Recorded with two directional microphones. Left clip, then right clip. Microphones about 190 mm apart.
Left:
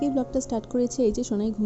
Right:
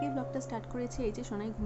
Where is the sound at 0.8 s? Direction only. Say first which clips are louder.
Left 13 dB; 35° left (ahead or behind).